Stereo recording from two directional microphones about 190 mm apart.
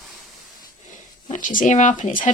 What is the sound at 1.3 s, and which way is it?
Speech, 45° left (ahead or behind).